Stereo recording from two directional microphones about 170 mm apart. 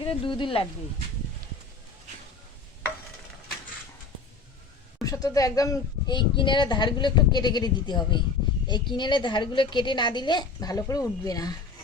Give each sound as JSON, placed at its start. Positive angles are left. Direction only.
{"t": 0.0, "sound": "speech", "side_deg": 30}
{"t": 5.0, "sound": "speech", "side_deg": 20}